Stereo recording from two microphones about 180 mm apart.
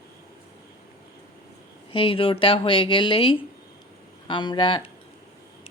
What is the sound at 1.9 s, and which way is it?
Speech, 30° left (ahead or behind).